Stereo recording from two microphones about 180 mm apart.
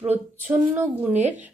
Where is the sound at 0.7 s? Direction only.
10° right (ahead or behind).